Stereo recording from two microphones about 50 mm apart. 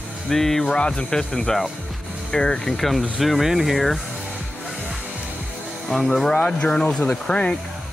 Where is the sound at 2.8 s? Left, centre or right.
Centre.